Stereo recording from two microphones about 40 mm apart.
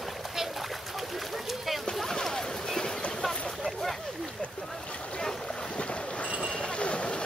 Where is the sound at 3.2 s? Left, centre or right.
Centre.